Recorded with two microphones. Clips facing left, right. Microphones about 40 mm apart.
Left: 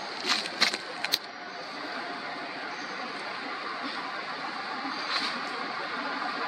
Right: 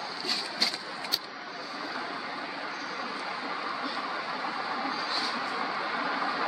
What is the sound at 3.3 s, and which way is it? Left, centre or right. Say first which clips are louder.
Vehicle: right 1 dB; centre.